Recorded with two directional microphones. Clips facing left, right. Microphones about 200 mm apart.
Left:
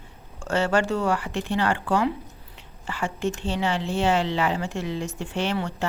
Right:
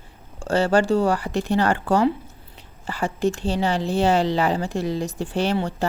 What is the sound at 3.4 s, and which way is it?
Speech, 35° right (ahead or behind).